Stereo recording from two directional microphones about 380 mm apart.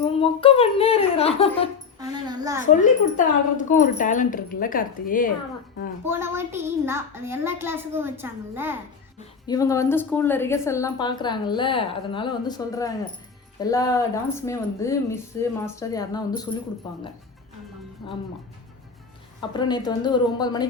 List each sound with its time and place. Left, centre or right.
0.0 s a woman's voice: centre
2.0 s music: centre
2.8 s speech: centre
6.1 s a woman's voice: centre
9.1 s a woman's voice: centre
19.4 s a woman's voice: centre